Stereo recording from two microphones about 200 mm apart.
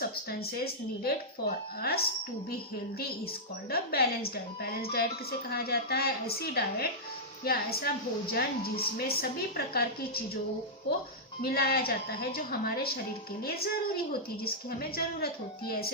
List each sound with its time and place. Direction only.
0.3 s a woman's voice: 50° left (ahead or behind)
3.7 s a woman's voice: 50° left (ahead or behind)
11.4 s a woman's voice: 50° left (ahead or behind)